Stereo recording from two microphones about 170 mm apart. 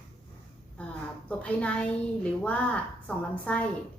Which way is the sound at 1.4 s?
5° left (ahead or behind).